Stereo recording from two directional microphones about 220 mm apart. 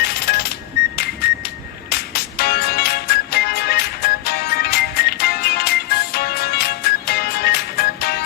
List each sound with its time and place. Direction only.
0.0 s music: 45° left (ahead or behind)